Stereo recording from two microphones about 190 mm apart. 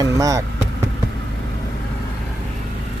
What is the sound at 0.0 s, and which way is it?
Speech, 15° right (ahead or behind).